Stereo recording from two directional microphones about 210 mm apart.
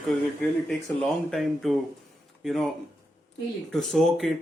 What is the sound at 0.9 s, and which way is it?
Speech, 5° left (ahead or behind).